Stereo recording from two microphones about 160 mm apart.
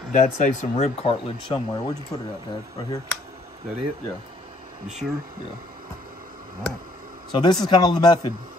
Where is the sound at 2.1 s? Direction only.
20° left (ahead or behind).